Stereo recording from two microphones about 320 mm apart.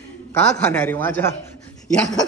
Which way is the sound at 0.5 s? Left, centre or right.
Centre.